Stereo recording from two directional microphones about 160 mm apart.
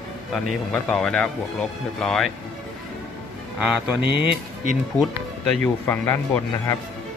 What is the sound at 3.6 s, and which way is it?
Speech, 5° right (ahead or behind).